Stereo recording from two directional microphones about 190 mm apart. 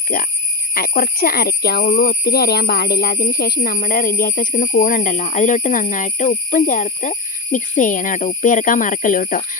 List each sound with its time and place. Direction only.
0.1 s speech: 50° left (ahead or behind)